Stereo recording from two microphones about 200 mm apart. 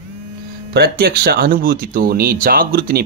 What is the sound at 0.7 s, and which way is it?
Speech, 50° right (ahead or behind).